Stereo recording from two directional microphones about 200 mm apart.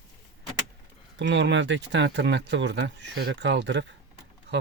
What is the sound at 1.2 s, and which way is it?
Speech, 65° right (ahead or behind).